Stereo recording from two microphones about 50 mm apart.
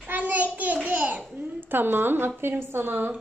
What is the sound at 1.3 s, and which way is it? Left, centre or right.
A woman's voice, right.